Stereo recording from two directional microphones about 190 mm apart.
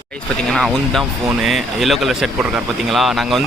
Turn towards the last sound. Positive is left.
turn(degrees=0)  # may be behind; listen again after turning